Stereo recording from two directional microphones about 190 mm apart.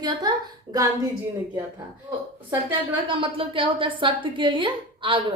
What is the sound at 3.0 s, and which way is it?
A woman's voice, 25° right (ahead or behind).